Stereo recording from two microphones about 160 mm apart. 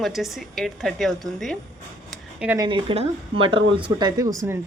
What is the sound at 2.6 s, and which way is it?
Speech, 30° right (ahead or behind).